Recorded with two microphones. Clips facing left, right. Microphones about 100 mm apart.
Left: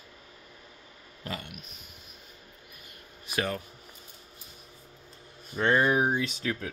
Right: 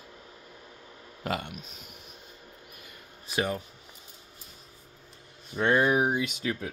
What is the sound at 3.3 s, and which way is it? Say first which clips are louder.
Speech: right 1 dB; 15° right (ahead or behind).